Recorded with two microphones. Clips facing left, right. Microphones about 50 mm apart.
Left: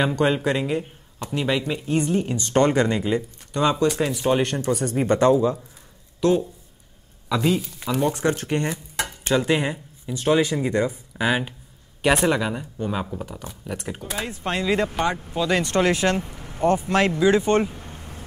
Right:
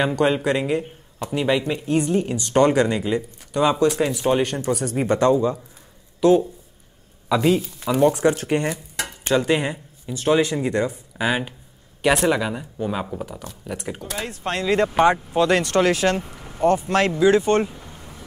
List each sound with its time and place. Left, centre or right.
0.2 s a woman's voice: centre
6.2 s a woman's voice: centre
8.1 s speech: centre
9.3 s a woman's voice: centre
15.0 s speech: centre
15.6 s speech: centre
17.8 s vehicle: left